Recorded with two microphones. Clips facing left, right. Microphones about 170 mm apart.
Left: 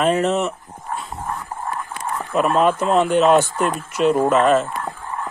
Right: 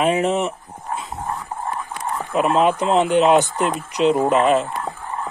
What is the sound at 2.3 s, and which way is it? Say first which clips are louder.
Speech: even; 15° right (ahead or behind).